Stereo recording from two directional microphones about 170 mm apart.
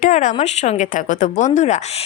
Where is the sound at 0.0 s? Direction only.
50° left (ahead or behind).